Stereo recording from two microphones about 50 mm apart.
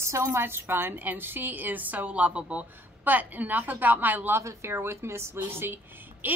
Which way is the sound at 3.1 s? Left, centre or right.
Right.